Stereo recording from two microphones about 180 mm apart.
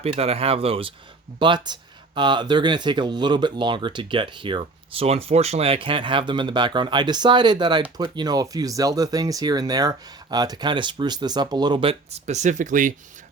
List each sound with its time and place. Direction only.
0.0 s speech: 35° right (ahead or behind)